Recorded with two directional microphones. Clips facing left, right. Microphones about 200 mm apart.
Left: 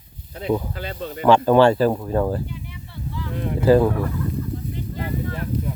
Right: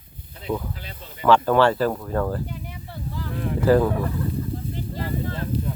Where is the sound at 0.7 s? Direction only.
65° left (ahead or behind).